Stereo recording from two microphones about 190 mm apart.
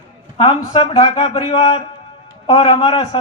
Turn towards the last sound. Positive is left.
turn(degrees=25)  # may be behind; listen again after turning